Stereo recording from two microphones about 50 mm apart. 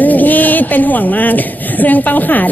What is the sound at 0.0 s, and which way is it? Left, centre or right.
A woman's voice, left.